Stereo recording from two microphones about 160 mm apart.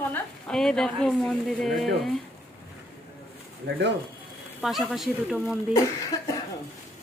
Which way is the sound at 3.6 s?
90° right.